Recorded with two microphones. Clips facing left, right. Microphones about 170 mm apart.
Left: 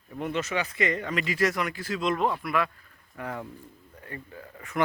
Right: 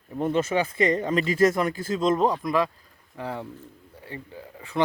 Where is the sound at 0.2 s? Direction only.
35° right (ahead or behind).